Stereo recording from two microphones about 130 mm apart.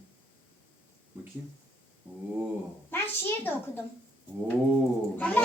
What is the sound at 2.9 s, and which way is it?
Speech, 15° left (ahead or behind).